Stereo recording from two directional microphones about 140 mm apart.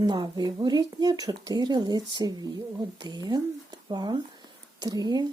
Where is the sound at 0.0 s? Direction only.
30° right (ahead or behind).